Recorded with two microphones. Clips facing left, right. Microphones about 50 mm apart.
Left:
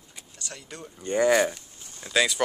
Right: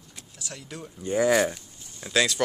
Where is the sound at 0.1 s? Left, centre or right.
Centre.